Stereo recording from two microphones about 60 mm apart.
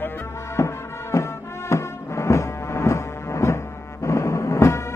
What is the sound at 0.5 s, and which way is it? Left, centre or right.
Music, left.